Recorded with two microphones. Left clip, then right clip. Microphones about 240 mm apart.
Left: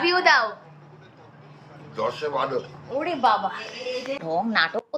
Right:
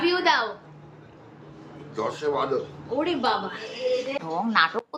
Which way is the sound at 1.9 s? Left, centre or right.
Centre.